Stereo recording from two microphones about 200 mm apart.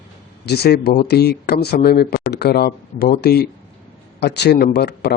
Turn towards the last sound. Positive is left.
turn(degrees=55)  # may be behind; listen again after turning